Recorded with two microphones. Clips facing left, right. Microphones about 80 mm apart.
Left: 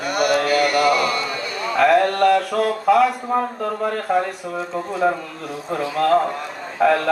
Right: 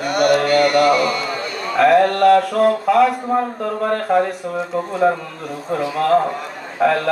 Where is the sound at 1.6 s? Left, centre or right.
Centre.